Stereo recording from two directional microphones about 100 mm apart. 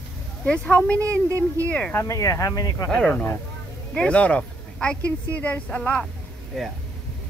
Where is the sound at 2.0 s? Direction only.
30° left (ahead or behind).